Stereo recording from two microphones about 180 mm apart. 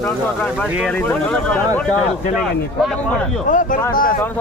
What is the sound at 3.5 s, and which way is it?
Speech, 45° left (ahead or behind).